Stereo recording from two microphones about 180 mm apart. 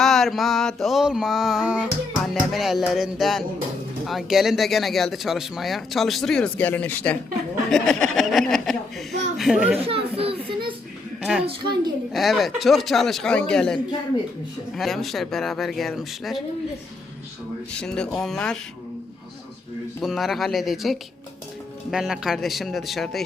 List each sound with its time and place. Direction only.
0.0 s music: centre (ahead or behind)
9.7 s a child's voice: 35° right (ahead or behind)
11.2 s a woman's voice: 5° right (ahead or behind)
11.4 s a woman's voice: 25° right (ahead or behind)
12.1 s music: centre (ahead or behind)
14.8 s music: centre (ahead or behind)
17.7 s music: 5° left (ahead or behind)
20.0 s music: centre (ahead or behind)